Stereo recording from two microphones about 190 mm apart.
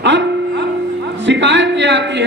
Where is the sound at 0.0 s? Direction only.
70° right (ahead or behind).